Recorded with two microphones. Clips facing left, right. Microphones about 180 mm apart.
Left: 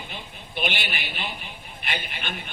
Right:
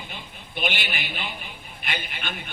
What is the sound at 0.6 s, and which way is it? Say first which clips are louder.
Speech: even; 50° right (ahead or behind).